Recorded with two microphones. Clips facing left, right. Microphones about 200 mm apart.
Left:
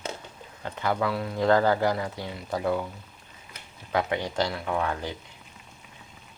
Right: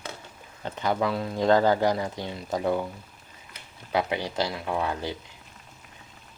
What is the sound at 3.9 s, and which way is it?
Speech, 10° right (ahead or behind).